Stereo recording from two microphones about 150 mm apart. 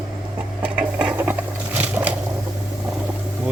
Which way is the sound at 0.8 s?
10° right (ahead or behind).